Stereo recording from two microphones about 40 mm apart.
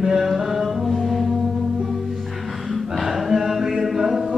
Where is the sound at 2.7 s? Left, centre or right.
Centre.